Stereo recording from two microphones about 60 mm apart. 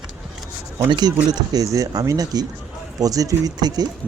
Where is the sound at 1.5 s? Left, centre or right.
Right.